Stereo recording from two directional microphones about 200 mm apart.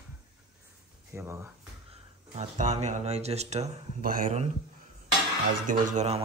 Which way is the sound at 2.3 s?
35° right (ahead or behind).